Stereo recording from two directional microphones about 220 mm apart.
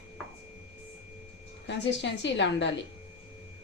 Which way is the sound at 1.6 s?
55° left (ahead or behind).